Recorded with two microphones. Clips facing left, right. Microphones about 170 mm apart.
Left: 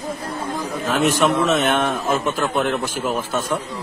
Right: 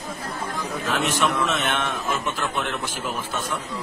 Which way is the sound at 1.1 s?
45° left (ahead or behind).